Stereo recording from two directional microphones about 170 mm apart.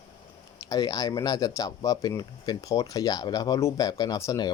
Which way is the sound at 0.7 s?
20° left (ahead or behind).